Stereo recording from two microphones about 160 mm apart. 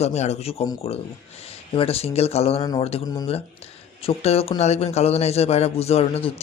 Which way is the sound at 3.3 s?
40° left (ahead or behind).